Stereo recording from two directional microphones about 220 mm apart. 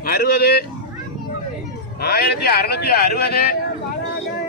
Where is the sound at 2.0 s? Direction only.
45° left (ahead or behind).